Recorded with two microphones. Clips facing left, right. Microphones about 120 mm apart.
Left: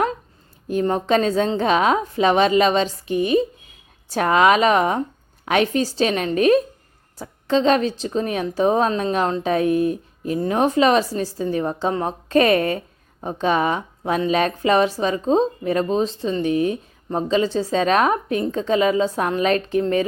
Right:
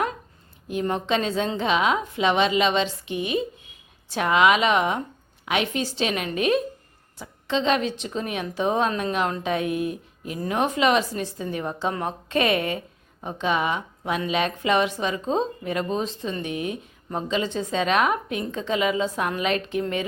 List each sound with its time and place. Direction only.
0.7 s speech: 40° left (ahead or behind)